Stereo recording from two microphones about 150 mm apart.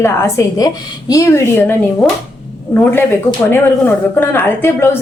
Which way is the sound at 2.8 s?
15° left (ahead or behind).